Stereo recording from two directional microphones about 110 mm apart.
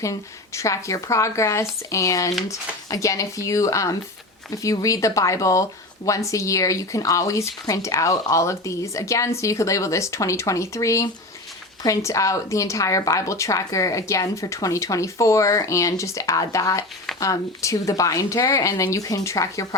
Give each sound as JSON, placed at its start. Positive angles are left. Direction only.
{"t": 0.0, "sound": "speech", "side_deg": 30}